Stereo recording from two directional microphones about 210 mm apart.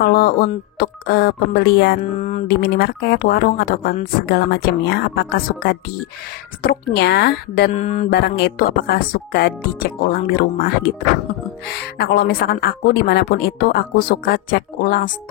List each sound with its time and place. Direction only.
0.0 s a woman's voice: 45° left (ahead or behind)
2.1 s mantra: 35° left (ahead or behind)
2.4 s a woman's voice: 50° left (ahead or behind)
7.7 s mantra: 35° left (ahead or behind)
8.1 s a woman's voice: 50° left (ahead or behind)